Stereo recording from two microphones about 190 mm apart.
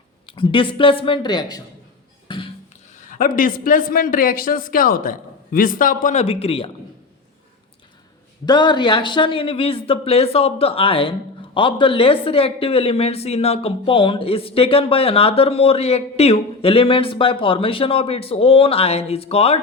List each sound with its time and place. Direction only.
0.3 s speech: 25° left (ahead or behind)
2.2 s a sound: 25° left (ahead or behind)
3.1 s a man's voice: 45° left (ahead or behind)
8.4 s speech: 25° left (ahead or behind)